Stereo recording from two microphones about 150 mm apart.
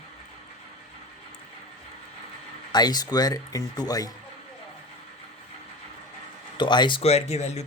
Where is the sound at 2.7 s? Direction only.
25° left (ahead or behind).